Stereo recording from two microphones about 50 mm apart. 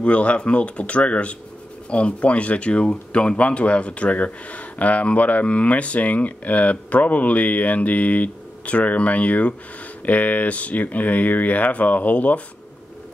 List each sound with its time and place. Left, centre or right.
0.0 s speech: left